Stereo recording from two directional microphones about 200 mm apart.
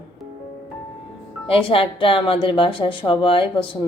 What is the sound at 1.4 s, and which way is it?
Speech, 25° left (ahead or behind).